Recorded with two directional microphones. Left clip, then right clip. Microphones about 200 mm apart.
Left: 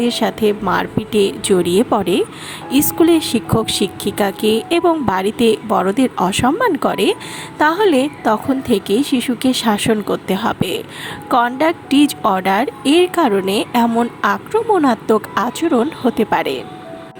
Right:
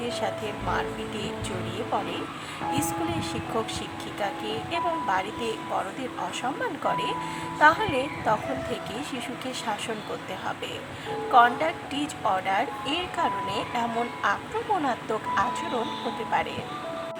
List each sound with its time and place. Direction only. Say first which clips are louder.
0.0 s speech: left 13 dB; 35° left (ahead or behind)